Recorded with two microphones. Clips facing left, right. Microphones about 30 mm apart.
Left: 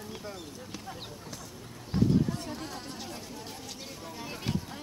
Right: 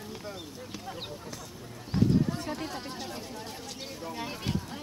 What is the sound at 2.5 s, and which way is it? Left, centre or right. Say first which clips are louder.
Speech: right 3 dB; centre.